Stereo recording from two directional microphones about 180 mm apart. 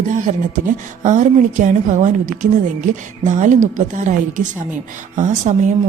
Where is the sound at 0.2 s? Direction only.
45° right (ahead or behind).